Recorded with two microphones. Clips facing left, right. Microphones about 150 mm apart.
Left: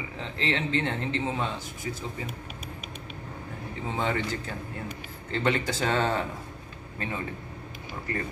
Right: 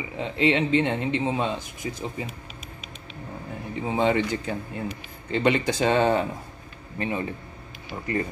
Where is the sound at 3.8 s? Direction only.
20° right (ahead or behind).